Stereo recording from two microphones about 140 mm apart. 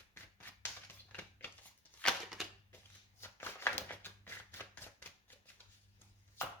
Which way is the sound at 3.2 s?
15° left (ahead or behind).